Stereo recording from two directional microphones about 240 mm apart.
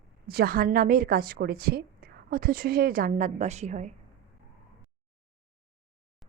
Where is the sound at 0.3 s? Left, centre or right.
Right.